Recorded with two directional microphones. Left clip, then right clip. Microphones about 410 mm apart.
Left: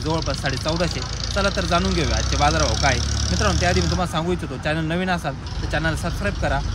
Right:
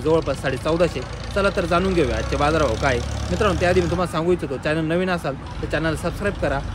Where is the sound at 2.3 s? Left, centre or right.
Centre.